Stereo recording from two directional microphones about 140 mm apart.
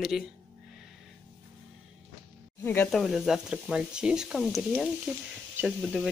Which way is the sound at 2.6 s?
15° left (ahead or behind).